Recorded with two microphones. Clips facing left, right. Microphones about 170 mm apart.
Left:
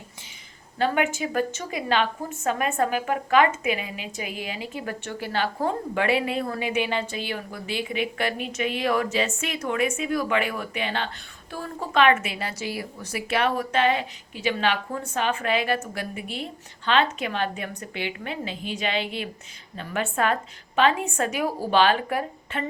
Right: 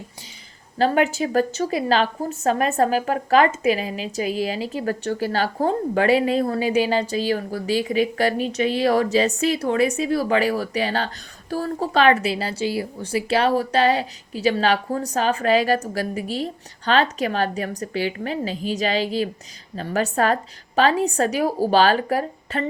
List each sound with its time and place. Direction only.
0.8 s a woman's voice: 35° right (ahead or behind)